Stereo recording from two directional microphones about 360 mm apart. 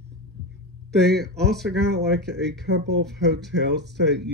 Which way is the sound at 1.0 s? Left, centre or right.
Right.